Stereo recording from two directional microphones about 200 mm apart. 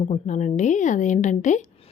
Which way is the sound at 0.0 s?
35° left (ahead or behind).